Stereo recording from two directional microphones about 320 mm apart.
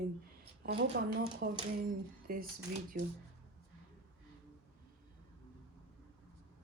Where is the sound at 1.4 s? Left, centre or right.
Right.